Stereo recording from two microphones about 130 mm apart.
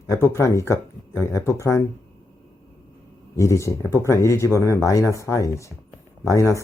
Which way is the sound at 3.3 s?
25° left (ahead or behind).